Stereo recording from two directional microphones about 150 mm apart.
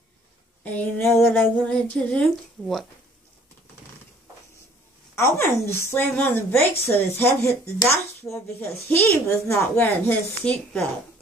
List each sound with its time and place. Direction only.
0.7 s speech: 15° left (ahead or behind)
5.1 s speech: 20° left (ahead or behind)